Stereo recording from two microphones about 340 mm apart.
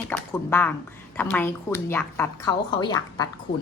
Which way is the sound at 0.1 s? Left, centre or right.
Centre.